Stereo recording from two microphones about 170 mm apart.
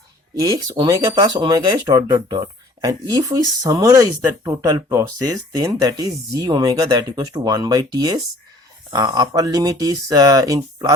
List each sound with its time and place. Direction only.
0.3 s speech: 20° right (ahead or behind)